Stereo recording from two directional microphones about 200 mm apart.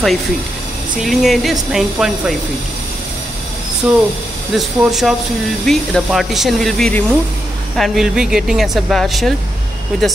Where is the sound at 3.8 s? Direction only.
5° right (ahead or behind).